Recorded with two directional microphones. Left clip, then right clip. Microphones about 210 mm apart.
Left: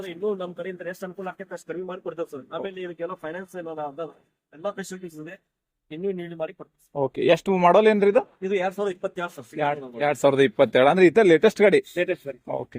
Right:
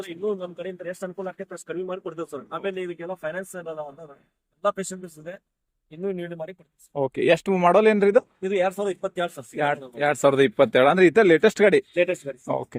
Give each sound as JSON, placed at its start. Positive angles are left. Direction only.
{"t": 0.3, "sound": "speech", "side_deg": -10}
{"t": 4.6, "sound": "a man's voice", "side_deg": -40}
{"t": 6.9, "sound": "speech", "side_deg": -15}
{"t": 9.6, "sound": "speech", "side_deg": -20}
{"t": 11.9, "sound": "speech", "side_deg": -45}